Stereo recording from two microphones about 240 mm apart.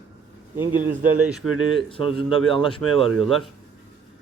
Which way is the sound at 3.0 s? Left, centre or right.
Centre.